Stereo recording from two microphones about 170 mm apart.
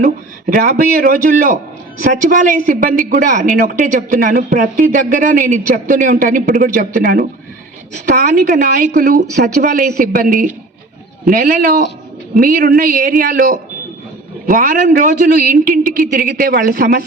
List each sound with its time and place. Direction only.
0.5 s a woman's voice: 55° right (ahead or behind)
8.4 s a woman's voice: 55° right (ahead or behind)